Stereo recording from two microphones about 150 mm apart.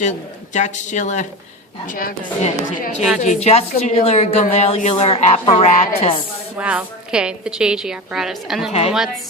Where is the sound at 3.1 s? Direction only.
45° left (ahead or behind).